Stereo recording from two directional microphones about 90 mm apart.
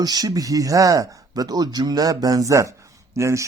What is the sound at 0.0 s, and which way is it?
Speech, 45° right (ahead or behind).